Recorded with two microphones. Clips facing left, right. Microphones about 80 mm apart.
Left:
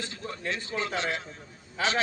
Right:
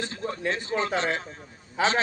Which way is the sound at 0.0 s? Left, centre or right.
Right.